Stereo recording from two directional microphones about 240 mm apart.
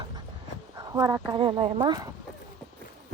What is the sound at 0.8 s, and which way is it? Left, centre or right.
Speech, centre.